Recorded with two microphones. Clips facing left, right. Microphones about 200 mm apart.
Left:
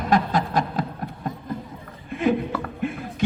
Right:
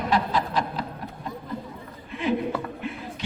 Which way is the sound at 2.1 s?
50° left (ahead or behind).